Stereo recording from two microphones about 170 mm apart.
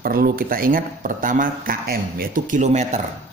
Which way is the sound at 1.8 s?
60° right (ahead or behind).